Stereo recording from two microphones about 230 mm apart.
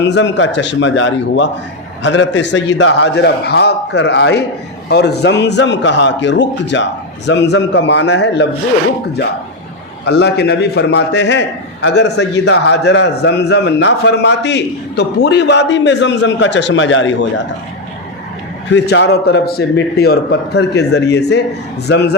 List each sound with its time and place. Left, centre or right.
0.0 s a man's voice: left
10.1 s a man's voice: left
18.7 s a man's voice: left